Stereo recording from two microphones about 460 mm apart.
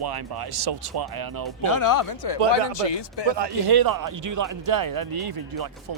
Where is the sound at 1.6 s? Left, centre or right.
Left.